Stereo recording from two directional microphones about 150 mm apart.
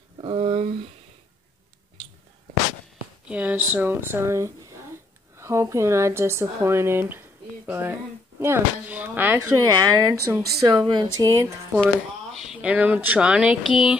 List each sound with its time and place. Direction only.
0.2 s a sound: 40° right (ahead or behind)
3.3 s speech: 10° right (ahead or behind)
9.7 s speech: 25° right (ahead or behind)
12.4 s speech: 5° right (ahead or behind)